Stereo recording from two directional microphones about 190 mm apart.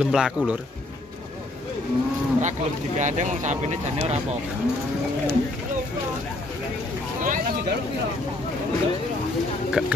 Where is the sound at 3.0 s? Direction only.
40° right (ahead or behind).